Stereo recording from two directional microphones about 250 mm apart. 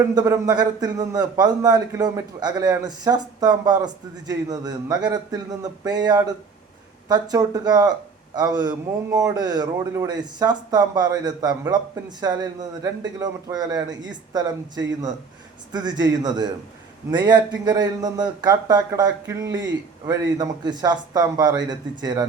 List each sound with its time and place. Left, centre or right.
0.1 s a man's voice: centre
15.7 s a man's voice: centre